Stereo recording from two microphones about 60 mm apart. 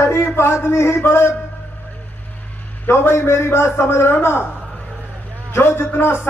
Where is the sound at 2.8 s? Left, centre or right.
Left.